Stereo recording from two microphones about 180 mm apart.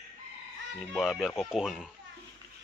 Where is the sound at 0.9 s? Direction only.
Centre (ahead or behind).